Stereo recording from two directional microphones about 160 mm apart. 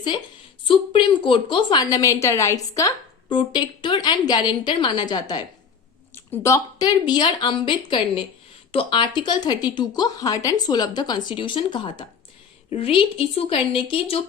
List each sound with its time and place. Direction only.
0.6 s a woman's voice: 30° left (ahead or behind)